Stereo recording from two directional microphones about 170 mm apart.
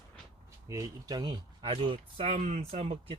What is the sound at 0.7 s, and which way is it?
Speech, 20° right (ahead or behind).